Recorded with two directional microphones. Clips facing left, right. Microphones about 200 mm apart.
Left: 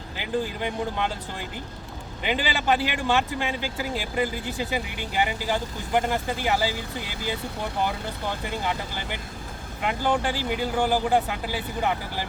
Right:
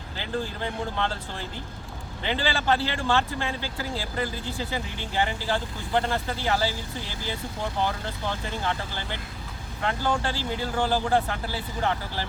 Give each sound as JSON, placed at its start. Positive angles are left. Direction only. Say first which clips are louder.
{"t": 0.2, "sound": "speech", "louder": "left 3 dB", "side_deg": 15}